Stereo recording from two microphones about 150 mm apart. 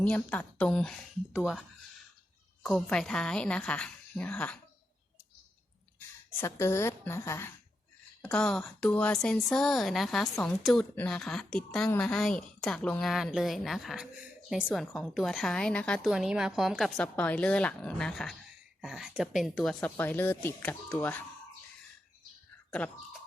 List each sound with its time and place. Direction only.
0.0 s a woman's voice: 10° left (ahead or behind)
1.3 s a woman's voice: 5° right (ahead or behind)
2.6 s a woman's voice: 5° left (ahead or behind)
6.3 s a woman's voice: 15° left (ahead or behind); by 19.9 s centre (ahead or behind)
20.0 s a woman's voice: 15° left (ahead or behind)